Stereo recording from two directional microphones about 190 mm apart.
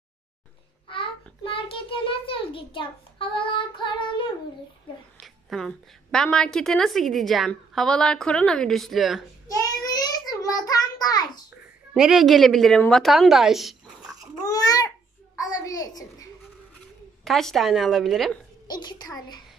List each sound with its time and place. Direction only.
0.8 s a child's voice: 25° left (ahead or behind)
5.2 s a woman's voice: centre (ahead or behind)
9.6 s child singing: 20° left (ahead or behind)
11.9 s a woman's voice: centre (ahead or behind)
14.5 s babbling: 20° left (ahead or behind)
15.4 s a sound: 20° left (ahead or behind)
17.2 s a woman's voice: centre (ahead or behind)
18.7 s a sound: 20° left (ahead or behind)